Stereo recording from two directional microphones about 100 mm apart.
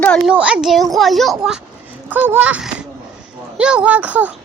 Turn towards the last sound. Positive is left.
turn(degrees=-15)  # may be behind; listen again after turning